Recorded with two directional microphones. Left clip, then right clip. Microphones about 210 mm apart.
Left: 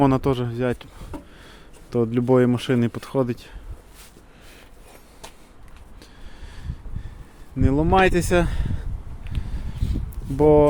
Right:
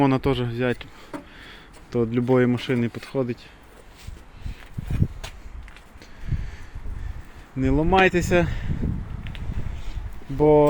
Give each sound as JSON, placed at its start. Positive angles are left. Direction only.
{"t": 0.0, "sound": "speech", "side_deg": 10}
{"t": 7.6, "sound": "speech", "side_deg": 10}
{"t": 9.8, "sound": "a sound", "side_deg": 35}